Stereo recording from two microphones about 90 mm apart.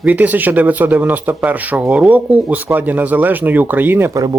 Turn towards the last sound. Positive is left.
turn(degrees=-20)  # may be behind; listen again after turning